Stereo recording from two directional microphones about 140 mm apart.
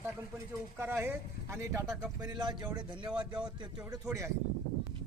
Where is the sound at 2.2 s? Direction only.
30° right (ahead or behind).